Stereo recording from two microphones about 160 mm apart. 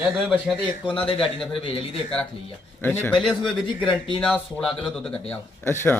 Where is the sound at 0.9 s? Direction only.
35° left (ahead or behind).